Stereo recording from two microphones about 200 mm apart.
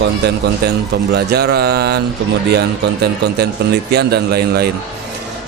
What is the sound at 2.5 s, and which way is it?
Speech, 55° right (ahead or behind).